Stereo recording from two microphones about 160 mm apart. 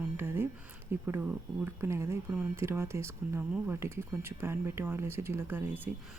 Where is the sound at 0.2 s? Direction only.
15° right (ahead or behind).